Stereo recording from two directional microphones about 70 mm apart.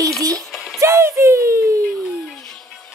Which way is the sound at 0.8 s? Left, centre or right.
Right.